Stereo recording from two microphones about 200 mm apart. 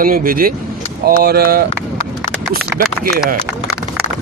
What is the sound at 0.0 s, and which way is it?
Speech, 45° right (ahead or behind).